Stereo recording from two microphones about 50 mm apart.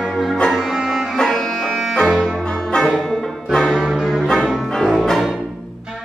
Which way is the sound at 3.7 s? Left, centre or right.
Centre.